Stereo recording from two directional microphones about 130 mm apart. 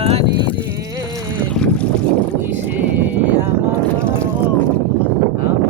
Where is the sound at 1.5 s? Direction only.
10° left (ahead or behind).